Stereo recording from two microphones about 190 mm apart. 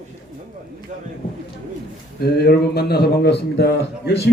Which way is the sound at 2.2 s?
55° left (ahead or behind).